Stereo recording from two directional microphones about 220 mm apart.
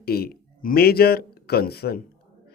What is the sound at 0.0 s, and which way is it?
Speech, 45° left (ahead or behind).